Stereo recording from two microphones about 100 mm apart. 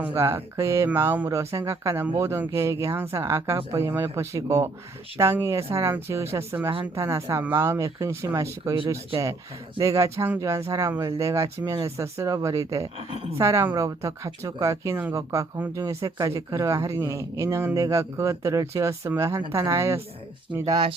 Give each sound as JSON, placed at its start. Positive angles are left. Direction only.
{"t": 0.0, "sound": "speech", "side_deg": -20}
{"t": 9.8, "sound": "speech", "side_deg": -35}